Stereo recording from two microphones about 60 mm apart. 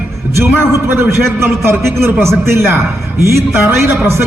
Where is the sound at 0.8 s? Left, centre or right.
Right.